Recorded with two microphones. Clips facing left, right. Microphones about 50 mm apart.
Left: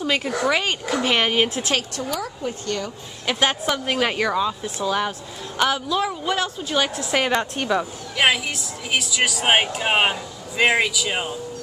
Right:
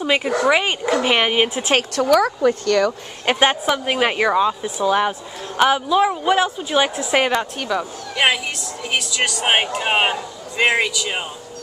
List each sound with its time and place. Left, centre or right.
0.0 s speech: centre
1.8 s speech: right
3.3 s speech: centre
7.3 s a woman's voice: centre